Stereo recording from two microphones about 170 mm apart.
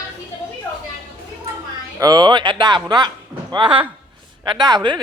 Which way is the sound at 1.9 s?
25° right (ahead or behind).